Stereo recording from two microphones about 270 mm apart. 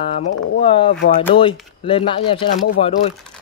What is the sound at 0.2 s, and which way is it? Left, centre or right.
Speech, left.